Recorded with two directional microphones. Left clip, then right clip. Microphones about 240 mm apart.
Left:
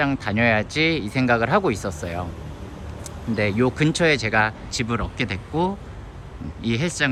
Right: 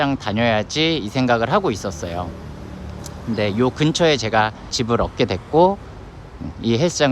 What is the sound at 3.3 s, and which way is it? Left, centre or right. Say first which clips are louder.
Speech: right 2 dB; centre.